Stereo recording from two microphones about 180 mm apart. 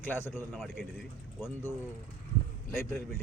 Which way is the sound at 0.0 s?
10° left (ahead or behind).